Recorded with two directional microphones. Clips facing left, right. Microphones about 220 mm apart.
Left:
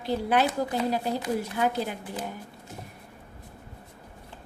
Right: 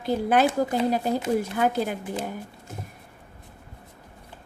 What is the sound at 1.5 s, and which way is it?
Speech, 50° right (ahead or behind).